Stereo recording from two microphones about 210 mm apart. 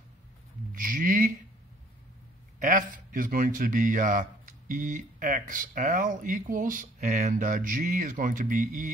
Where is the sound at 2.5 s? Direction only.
35° right (ahead or behind).